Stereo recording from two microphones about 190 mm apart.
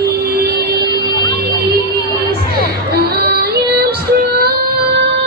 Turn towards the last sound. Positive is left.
turn(degrees=-55)  # may be behind; listen again after turning